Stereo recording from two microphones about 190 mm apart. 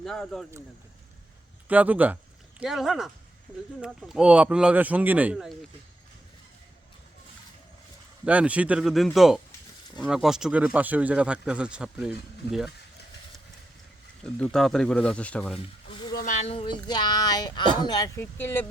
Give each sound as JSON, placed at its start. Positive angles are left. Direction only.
{"t": 0.0, "sound": "speech", "side_deg": 0}
{"t": 1.6, "sound": "speech", "side_deg": -10}
{"t": 8.2, "sound": "speech", "side_deg": -5}
{"t": 14.3, "sound": "speech", "side_deg": 5}
{"t": 15.9, "sound": "a sound", "side_deg": 25}
{"t": 16.1, "sound": "speech", "side_deg": 40}